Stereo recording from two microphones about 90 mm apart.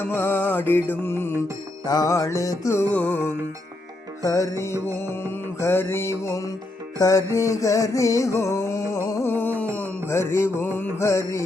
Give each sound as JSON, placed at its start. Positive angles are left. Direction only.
{"t": 0.0, "sound": "music", "side_deg": 25}
{"t": 1.8, "sound": "music", "side_deg": 45}
{"t": 2.9, "sound": "music", "side_deg": 15}
{"t": 3.2, "sound": "music", "side_deg": -25}
{"t": 4.2, "sound": "music", "side_deg": 40}
{"t": 9.2, "sound": "music", "side_deg": 25}